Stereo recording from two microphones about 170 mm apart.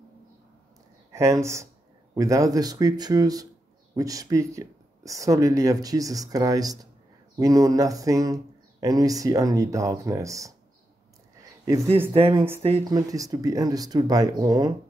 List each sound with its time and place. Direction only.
1.1 s speech: 15° right (ahead or behind)
11.6 s speech: 20° right (ahead or behind)
12.1 s speech: 30° right (ahead or behind)
12.8 s speech: 20° right (ahead or behind)